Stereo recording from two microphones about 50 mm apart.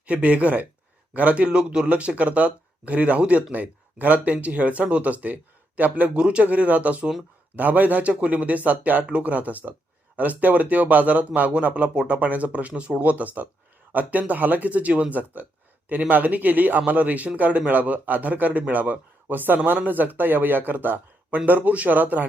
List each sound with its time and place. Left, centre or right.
0.0 s speech: right
6.1 s speech: right